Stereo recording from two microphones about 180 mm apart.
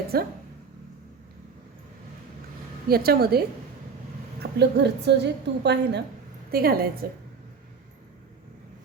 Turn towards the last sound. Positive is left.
turn(degrees=-55)  # may be behind; listen again after turning